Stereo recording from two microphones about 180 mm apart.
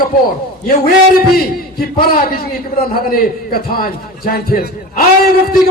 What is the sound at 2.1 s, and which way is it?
A man's voice, 55° left (ahead or behind).